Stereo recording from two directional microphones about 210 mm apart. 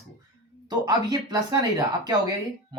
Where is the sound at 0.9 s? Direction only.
20° right (ahead or behind).